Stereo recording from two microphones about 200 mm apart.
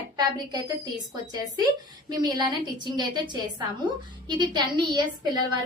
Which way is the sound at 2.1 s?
20° right (ahead or behind).